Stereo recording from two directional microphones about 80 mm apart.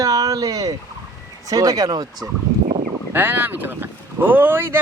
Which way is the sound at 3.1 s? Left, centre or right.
Right.